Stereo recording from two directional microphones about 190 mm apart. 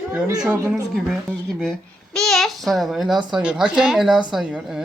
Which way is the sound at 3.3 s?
5° right (ahead or behind).